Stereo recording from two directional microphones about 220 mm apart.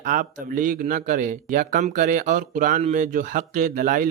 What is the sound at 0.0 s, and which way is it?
A man's voice, 35° right (ahead or behind).